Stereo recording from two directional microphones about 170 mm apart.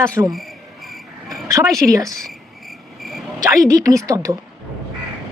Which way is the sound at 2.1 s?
Centre (ahead or behind).